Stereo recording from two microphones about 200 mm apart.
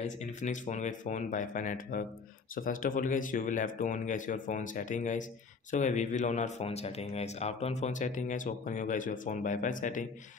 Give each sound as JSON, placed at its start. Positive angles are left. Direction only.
{"t": 0.0, "sound": "speech", "side_deg": 35}